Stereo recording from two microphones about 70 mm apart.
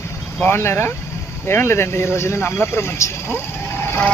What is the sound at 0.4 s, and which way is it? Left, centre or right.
Speech, left.